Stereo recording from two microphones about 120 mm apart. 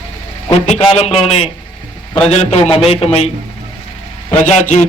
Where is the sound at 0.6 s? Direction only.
65° left (ahead or behind).